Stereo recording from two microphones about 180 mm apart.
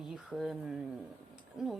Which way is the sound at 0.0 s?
Centre (ahead or behind).